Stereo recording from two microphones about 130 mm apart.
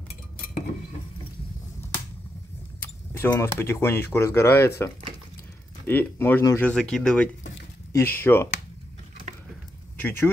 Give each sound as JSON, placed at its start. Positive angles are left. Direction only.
{"t": 2.8, "sound": "speech", "side_deg": 15}
{"t": 6.6, "sound": "speech", "side_deg": 5}
{"t": 7.9, "sound": "speech", "side_deg": 15}
{"t": 10.0, "sound": "speech", "side_deg": 15}